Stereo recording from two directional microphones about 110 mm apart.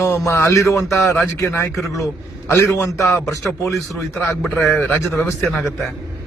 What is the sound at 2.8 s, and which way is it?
Speech, 25° left (ahead or behind).